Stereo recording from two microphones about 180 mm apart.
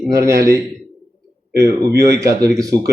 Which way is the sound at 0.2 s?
15° right (ahead or behind).